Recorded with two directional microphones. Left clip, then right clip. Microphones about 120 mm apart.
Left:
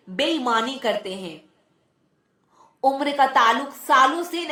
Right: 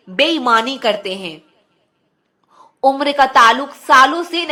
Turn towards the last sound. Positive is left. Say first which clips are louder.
# right 7 dB
turn(degrees=-20)  # may be behind; listen again after turning